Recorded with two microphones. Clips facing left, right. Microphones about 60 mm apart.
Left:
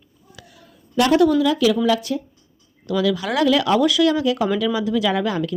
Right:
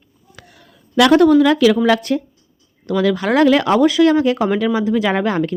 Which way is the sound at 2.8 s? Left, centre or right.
Right.